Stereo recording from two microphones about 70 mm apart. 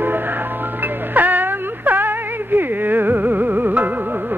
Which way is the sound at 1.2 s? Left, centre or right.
Right.